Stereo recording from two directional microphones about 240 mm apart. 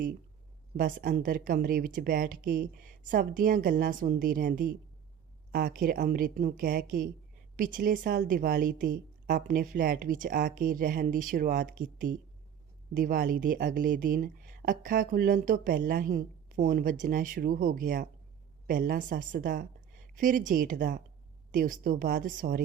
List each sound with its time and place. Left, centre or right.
0.8 s a woman's voice: right